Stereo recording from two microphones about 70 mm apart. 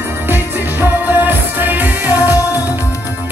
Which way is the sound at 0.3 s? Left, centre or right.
Right.